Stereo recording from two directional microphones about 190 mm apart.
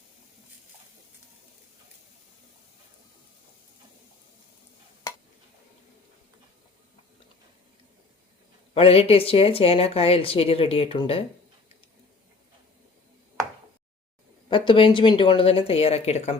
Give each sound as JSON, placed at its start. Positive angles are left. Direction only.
{"t": 8.7, "sound": "a woman's voice", "side_deg": 30}
{"t": 14.5, "sound": "speech", "side_deg": 25}